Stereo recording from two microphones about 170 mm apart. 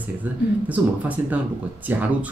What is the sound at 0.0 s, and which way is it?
Speech, 10° right (ahead or behind).